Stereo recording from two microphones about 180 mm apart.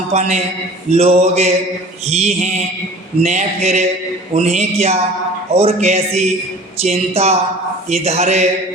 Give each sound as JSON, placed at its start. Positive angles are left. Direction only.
{"t": 0.1, "sound": "a man's voice", "side_deg": -40}